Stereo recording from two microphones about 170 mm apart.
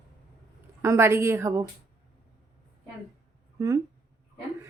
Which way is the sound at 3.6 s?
20° right (ahead or behind).